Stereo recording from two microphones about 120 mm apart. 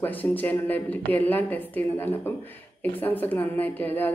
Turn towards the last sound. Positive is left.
turn(degrees=15)  # may be behind; listen again after turning